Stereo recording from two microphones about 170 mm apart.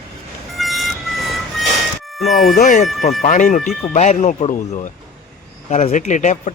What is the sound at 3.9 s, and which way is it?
Speech, 40° left (ahead or behind).